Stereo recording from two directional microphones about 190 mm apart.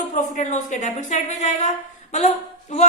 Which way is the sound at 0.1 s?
40° left (ahead or behind).